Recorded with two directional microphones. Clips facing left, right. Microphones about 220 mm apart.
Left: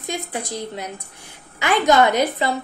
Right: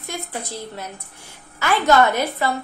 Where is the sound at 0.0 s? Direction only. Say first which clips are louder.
Left 3 dB; 15° left (ahead or behind).